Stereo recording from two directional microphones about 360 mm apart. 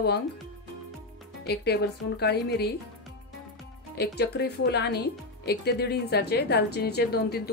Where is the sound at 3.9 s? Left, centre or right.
Left.